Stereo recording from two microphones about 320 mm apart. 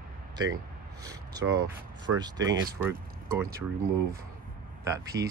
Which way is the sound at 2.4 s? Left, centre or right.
Right.